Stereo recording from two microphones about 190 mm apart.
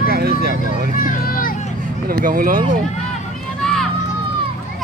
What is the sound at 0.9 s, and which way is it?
Children playing, 45° left (ahead or behind).